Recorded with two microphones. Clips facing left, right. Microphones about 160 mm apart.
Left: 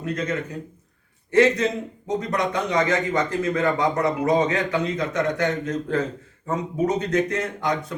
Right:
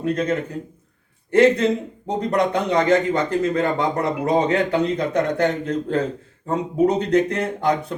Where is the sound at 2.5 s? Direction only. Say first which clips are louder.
Right 3 dB; 30° right (ahead or behind).